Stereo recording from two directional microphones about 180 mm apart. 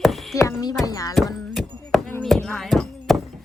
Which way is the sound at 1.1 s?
Centre (ahead or behind).